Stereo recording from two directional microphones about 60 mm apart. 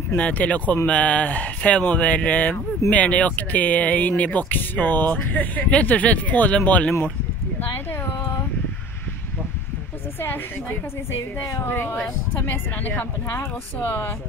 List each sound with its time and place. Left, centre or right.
0.1 s speech: left
11.6 s speech: left